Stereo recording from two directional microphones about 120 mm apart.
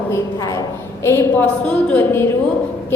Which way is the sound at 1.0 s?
20° left (ahead or behind).